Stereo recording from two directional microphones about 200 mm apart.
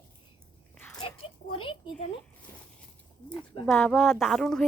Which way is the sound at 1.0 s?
25° left (ahead or behind).